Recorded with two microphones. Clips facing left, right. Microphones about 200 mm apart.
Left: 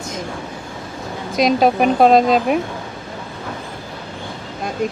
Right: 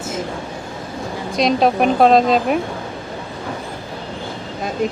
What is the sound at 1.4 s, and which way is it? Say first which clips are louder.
Speech: left 1 dB; centre (ahead or behind).